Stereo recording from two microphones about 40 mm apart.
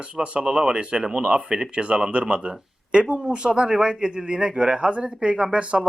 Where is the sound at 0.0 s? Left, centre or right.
Right.